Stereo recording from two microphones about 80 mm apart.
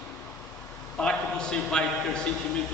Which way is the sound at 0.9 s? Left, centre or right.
Centre.